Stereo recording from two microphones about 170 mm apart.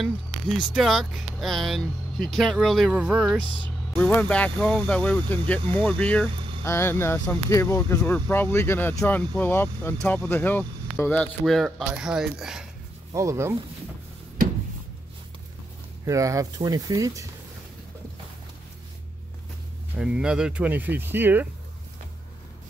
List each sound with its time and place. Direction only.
0.0 s speech: centre (ahead or behind)
3.6 s speech: 10° left (ahead or behind)
13.1 s speech: 15° right (ahead or behind)
16.1 s speech: 20° right (ahead or behind)
20.0 s speech: 5° right (ahead or behind)